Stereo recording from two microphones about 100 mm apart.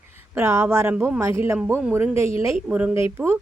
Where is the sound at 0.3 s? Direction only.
25° right (ahead or behind).